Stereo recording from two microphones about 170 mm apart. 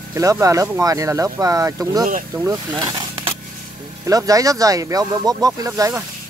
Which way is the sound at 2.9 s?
30° right (ahead or behind).